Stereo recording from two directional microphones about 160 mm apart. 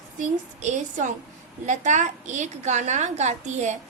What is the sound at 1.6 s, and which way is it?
A woman's voice, 50° right (ahead or behind).